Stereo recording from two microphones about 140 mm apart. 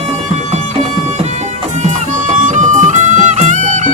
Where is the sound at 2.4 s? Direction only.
60° right (ahead or behind).